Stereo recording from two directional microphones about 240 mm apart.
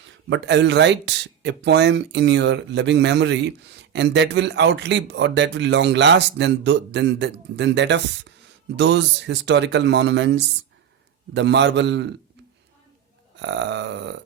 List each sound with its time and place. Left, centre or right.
0.3 s speech: right
13.3 s speech: right